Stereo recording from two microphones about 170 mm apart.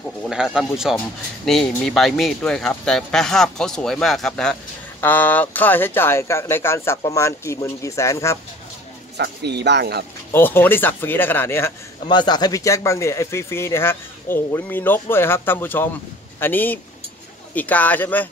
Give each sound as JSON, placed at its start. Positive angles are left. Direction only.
{"t": 0.3, "sound": "speech", "side_deg": -5}
{"t": 9.1, "sound": "speech", "side_deg": -75}
{"t": 10.3, "sound": "speech", "side_deg": 10}
{"t": 12.1, "sound": "speech", "side_deg": 25}